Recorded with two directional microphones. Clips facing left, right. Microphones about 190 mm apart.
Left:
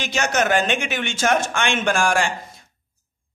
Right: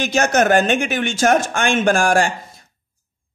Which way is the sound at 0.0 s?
45° right (ahead or behind).